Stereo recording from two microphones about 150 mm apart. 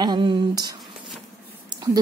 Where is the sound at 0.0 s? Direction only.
30° right (ahead or behind).